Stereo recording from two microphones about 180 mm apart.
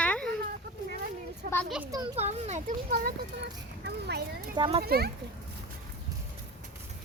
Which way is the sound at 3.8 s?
65° right (ahead or behind).